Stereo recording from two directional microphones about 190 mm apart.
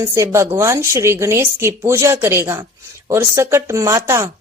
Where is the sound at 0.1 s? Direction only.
15° right (ahead or behind).